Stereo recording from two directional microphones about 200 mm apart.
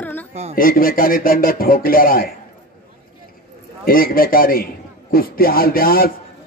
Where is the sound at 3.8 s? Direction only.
45° left (ahead or behind).